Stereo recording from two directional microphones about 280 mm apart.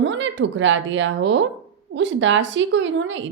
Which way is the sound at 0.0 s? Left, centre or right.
Right.